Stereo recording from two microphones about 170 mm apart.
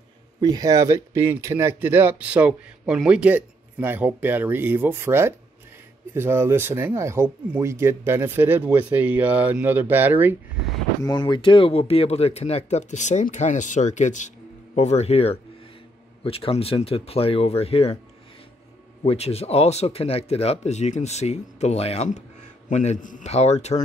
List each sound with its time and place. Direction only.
0.4 s speech: 20° right (ahead or behind)
11.0 s speech: 25° left (ahead or behind)
19.0 s speech: 35° left (ahead or behind)